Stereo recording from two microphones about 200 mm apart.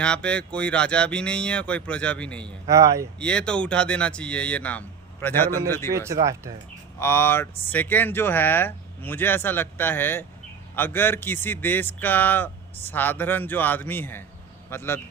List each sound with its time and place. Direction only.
0.0 s speech: 5° left (ahead or behind)
2.6 s speech: 15° right (ahead or behind)
3.2 s speech: 5° left (ahead or behind)
5.9 s speech: 15° right (ahead or behind)
7.0 s speech: 10° left (ahead or behind)